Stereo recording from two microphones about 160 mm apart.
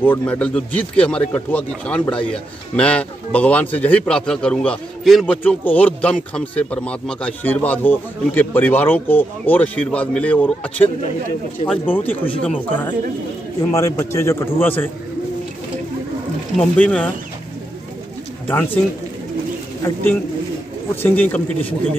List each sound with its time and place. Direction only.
0.0 s speech: 10° left (ahead or behind)
13.7 s speech: 20° left (ahead or behind)
16.5 s speech: 5° left (ahead or behind)
18.5 s speech: 15° left (ahead or behind)
21.0 s speech: 10° left (ahead or behind)